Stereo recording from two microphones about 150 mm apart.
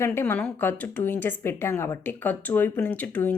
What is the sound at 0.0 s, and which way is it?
Speech, 15° left (ahead or behind).